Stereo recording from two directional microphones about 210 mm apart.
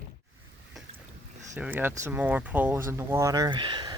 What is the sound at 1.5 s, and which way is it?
Speech, 10° right (ahead or behind).